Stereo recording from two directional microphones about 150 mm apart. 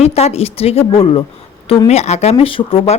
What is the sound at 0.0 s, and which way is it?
Speech, 45° left (ahead or behind).